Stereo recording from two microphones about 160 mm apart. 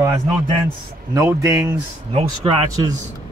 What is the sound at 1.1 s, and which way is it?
Speech, 20° right (ahead or behind).